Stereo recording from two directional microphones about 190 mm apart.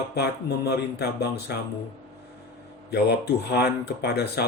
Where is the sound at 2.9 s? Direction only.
60° left (ahead or behind).